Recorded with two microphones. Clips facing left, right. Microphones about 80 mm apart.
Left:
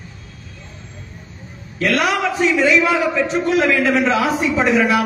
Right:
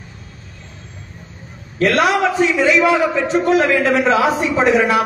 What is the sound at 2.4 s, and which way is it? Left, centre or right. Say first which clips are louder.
A man's voice: left 1 dB; right.